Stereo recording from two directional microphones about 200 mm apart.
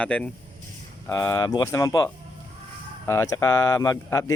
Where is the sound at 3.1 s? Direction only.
15° left (ahead or behind).